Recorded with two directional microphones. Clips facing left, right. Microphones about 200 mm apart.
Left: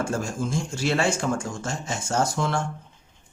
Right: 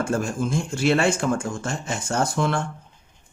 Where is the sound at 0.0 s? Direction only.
55° right (ahead or behind).